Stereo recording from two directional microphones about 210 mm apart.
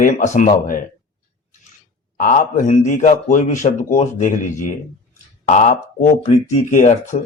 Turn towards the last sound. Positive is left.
turn(degrees=35)  # may be behind; listen again after turning